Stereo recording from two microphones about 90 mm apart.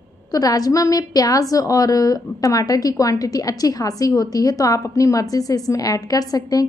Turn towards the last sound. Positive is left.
turn(degrees=45)  # may be behind; listen again after turning